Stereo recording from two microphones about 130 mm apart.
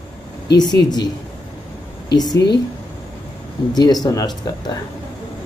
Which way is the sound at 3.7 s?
30° left (ahead or behind).